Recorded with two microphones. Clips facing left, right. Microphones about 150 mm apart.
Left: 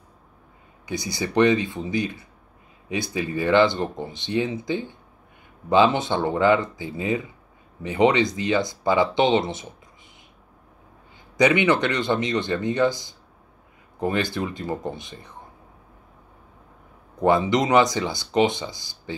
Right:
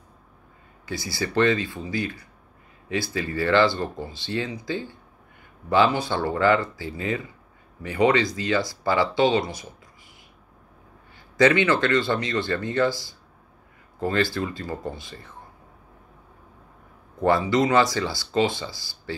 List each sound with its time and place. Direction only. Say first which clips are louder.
0.8 s speech: left 1 dB; 20° left (ahead or behind)
11.3 s speech: even; 20° left (ahead or behind)
17.2 s speech: left 1 dB; 20° left (ahead or behind)